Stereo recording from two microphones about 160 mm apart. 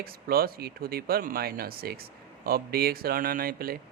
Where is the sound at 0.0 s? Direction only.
70° right (ahead or behind).